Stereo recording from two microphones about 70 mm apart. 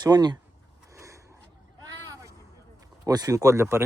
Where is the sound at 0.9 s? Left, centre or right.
Right.